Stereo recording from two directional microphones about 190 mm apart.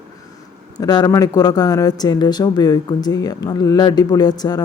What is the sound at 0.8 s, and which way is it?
Speech, 20° left (ahead or behind).